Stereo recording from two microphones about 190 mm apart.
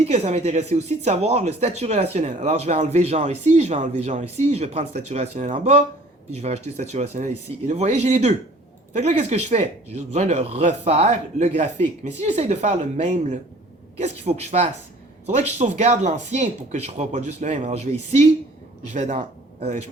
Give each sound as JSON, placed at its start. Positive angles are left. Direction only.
{"t": 0.0, "sound": "speech", "side_deg": -35}